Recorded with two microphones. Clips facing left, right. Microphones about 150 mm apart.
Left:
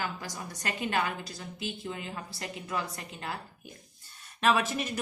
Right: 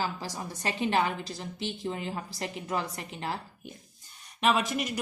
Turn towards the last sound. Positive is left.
turn(degrees=-15)  # may be behind; listen again after turning